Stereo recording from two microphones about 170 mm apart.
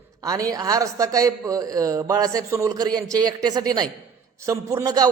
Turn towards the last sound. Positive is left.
turn(degrees=-20)  # may be behind; listen again after turning